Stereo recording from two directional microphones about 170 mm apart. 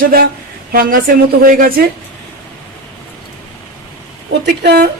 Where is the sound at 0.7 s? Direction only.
55° right (ahead or behind).